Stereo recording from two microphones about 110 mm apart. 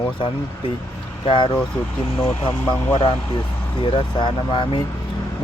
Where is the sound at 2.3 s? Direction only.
15° left (ahead or behind).